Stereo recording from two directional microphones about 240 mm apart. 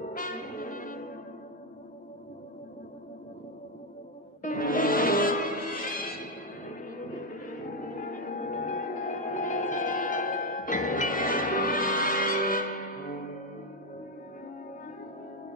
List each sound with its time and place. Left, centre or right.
0.1 s brass instrument: left
4.4 s music: left
8.4 s music: left